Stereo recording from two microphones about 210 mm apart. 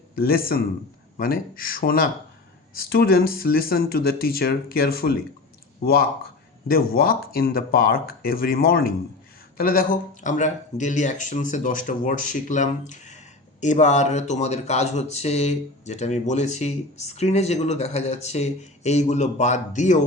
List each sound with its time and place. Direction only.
0.2 s speech: 45° left (ahead or behind)
6.7 s speech: 45° left (ahead or behind)